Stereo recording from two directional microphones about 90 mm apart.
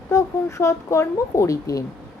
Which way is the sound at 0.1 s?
35° left (ahead or behind).